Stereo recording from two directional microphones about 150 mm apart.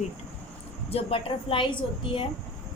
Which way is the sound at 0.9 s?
35° left (ahead or behind).